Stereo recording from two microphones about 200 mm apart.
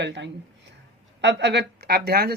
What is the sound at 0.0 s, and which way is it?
Speech, 60° right (ahead or behind).